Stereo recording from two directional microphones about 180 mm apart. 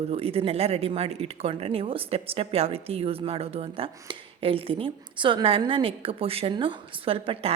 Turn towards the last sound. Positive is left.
turn(degrees=-30)  # may be behind; listen again after turning